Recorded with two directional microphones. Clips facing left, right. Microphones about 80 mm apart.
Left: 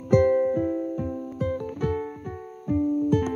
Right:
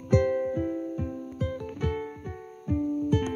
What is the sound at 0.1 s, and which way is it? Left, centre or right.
Music, left.